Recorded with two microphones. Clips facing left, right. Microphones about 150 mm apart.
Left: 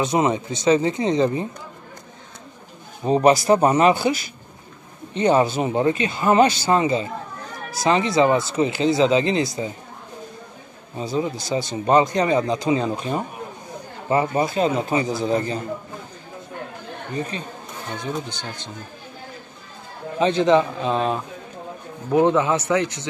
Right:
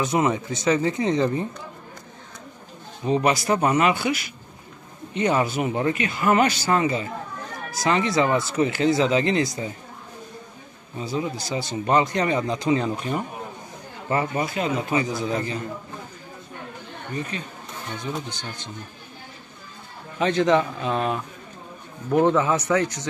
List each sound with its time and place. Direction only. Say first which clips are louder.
0.0 s speech: left 2 dB; 25° left (ahead or behind)
3.2 s a man's voice: left 7 dB; 30° left (ahead or behind)
11.0 s a man's voice: left 3 dB; 25° left (ahead or behind)
20.2 s speech: left 3 dB; 25° left (ahead or behind)
22.2 s a man's voice: left 1 dB; 15° left (ahead or behind)